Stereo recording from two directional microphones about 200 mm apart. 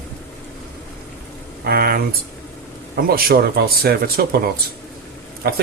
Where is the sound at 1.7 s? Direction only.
50° right (ahead or behind).